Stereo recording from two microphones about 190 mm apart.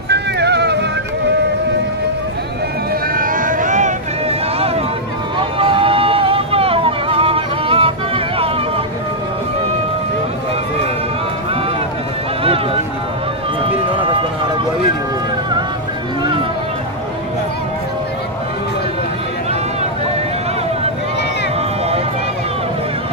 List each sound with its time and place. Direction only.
0.1 s music: 60° right (ahead or behind)
2.9 s boat: 45° right (ahead or behind)
5.4 s vehicle: 30° right (ahead or behind)